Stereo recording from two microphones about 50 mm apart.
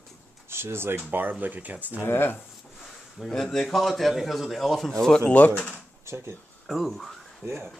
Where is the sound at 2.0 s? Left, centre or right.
Left.